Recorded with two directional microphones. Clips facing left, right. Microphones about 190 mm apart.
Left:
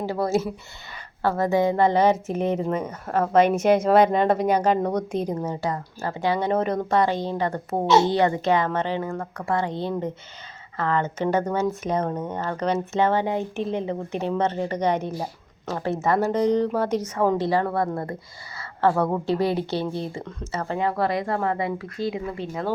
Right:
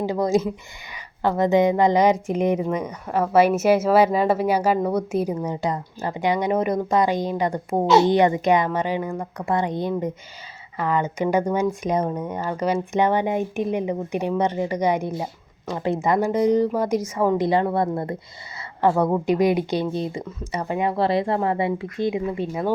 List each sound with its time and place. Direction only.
0.0 s speech: 15° right (ahead or behind)